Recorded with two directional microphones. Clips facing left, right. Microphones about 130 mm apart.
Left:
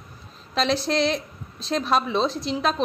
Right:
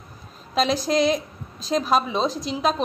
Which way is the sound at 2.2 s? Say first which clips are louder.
Even; 40° right (ahead or behind).